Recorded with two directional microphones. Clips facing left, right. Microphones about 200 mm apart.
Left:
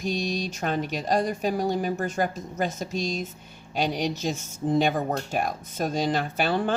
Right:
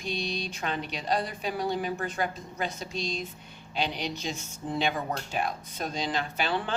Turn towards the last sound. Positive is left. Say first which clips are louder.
# left 5 dB
turn(degrees=45)  # may be behind; listen again after turning